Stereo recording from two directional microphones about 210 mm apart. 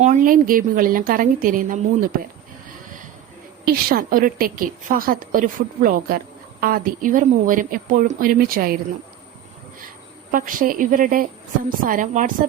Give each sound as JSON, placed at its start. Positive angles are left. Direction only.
{"t": 0.0, "sound": "a woman's voice", "side_deg": -40}
{"t": 3.7, "sound": "a woman's voice", "side_deg": -45}
{"t": 10.3, "sound": "a woman's voice", "side_deg": -40}